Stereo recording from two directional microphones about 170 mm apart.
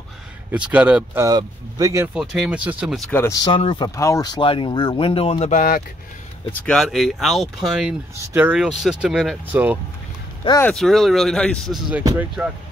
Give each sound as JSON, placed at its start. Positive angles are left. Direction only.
{"t": 0.5, "sound": "speech", "side_deg": -10}
{"t": 1.2, "sound": "speech", "side_deg": -20}
{"t": 2.1, "sound": "speech", "side_deg": -5}
{"t": 3.0, "sound": "speech", "side_deg": 10}
{"t": 3.4, "sound": "speech", "side_deg": 30}
{"t": 6.5, "sound": "speech", "side_deg": 5}
{"t": 10.6, "sound": "speech", "side_deg": 5}
{"t": 12.0, "sound": "speech", "side_deg": -20}